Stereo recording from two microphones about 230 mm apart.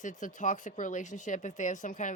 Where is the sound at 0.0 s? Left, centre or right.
Left.